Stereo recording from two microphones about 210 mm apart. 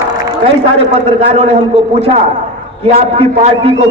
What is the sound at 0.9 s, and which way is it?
Speech, 25° right (ahead or behind).